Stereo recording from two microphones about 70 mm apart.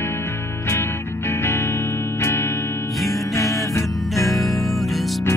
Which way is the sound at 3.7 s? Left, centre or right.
Left.